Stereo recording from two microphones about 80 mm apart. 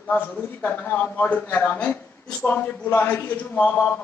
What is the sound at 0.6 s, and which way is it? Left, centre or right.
A man's voice, left.